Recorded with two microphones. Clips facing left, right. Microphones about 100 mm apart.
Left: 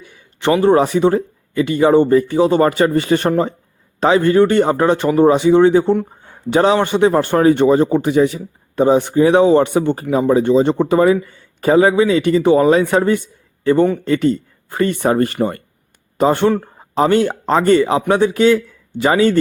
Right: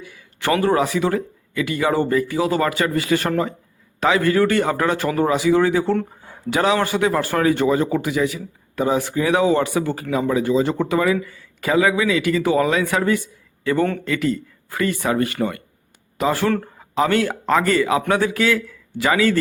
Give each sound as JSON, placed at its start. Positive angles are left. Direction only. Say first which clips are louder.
{"t": 0.0, "sound": "speech", "louder": "left 6 dB", "side_deg": 30}
{"t": 6.5, "sound": "speech", "louder": "left 5 dB", "side_deg": 30}